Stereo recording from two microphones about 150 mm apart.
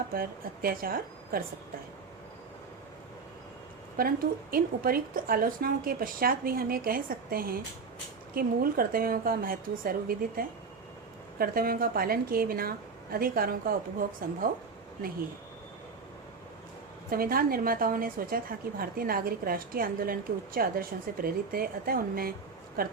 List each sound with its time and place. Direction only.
0.1 s a woman's voice: 75° right (ahead or behind)
4.0 s a woman's voice: 75° right (ahead or behind)
14.0 s a woman's voice: 65° right (ahead or behind)
17.1 s a woman's voice: 75° right (ahead or behind)